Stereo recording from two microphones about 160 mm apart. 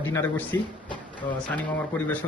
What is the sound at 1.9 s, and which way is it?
Speech, 10° left (ahead or behind).